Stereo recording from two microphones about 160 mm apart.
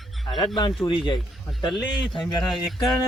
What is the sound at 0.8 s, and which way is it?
Speech, 25° left (ahead or behind).